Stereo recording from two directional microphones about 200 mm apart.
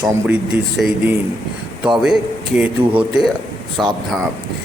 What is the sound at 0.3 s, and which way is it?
Speech, 5° right (ahead or behind).